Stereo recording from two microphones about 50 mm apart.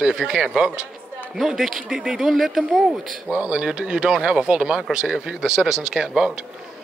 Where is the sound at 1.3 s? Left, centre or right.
Centre.